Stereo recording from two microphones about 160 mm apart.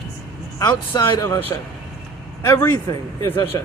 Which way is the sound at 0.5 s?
25° left (ahead or behind).